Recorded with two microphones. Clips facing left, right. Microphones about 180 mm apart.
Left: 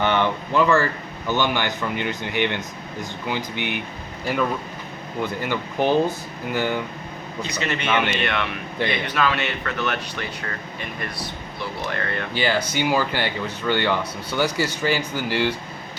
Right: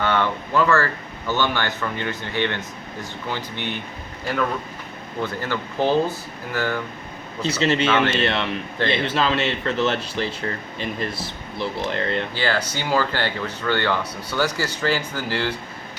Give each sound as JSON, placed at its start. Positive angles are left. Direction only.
{"t": 0.0, "sound": "speech", "side_deg": 20}
{"t": 5.2, "sound": "speech", "side_deg": 15}
{"t": 7.6, "sound": "speech", "side_deg": -25}
{"t": 7.9, "sound": "speech", "side_deg": 15}
{"t": 8.2, "sound": "speech", "side_deg": -30}
{"t": 11.6, "sound": "speech", "side_deg": -25}
{"t": 12.3, "sound": "speech", "side_deg": 15}